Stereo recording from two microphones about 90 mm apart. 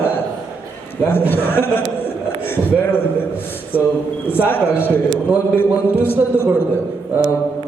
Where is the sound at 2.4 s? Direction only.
25° left (ahead or behind).